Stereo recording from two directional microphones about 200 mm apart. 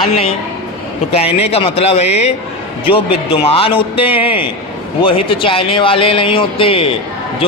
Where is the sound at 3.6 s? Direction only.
25° left (ahead or behind).